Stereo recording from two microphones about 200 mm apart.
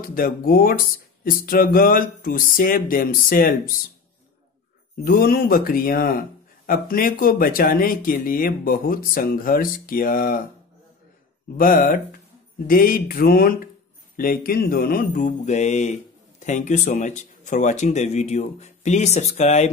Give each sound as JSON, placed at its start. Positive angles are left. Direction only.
{"t": 0.1, "sound": "speech", "side_deg": 45}
{"t": 5.0, "sound": "speech", "side_deg": 50}
{"t": 11.5, "sound": "speech", "side_deg": 45}